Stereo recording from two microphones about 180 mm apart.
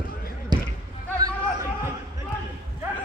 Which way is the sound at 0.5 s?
25° right (ahead or behind).